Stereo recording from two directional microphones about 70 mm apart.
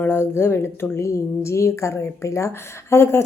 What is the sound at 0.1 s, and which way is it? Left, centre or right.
A woman's voice, left.